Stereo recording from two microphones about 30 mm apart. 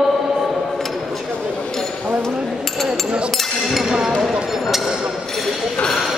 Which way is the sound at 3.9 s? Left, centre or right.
Right.